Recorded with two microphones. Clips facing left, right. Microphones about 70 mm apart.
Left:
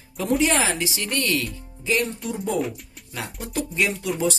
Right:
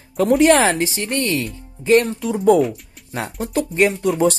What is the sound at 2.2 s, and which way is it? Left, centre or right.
Speech, right.